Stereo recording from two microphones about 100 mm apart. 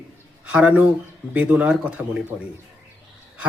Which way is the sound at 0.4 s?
15° right (ahead or behind).